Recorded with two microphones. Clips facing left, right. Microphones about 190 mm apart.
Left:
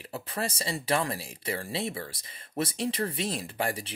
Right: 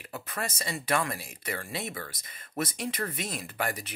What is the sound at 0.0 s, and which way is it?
Speech, 30° left (ahead or behind).